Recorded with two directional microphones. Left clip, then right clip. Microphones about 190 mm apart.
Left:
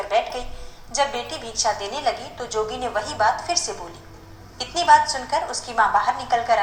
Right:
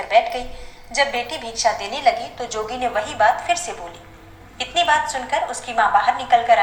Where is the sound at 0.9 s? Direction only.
5° right (ahead or behind).